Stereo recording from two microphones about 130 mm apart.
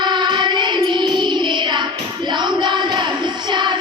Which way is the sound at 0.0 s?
35° right (ahead or behind).